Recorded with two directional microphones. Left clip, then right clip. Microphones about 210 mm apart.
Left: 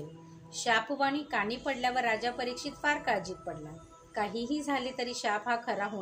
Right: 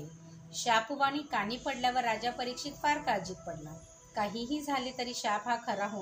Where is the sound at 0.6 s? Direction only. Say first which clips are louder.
Even; 35° left (ahead or behind).